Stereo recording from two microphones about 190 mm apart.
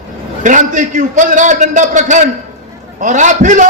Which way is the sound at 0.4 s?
40° right (ahead or behind).